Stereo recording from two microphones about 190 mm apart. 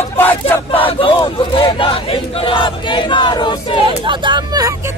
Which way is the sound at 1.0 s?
25° left (ahead or behind).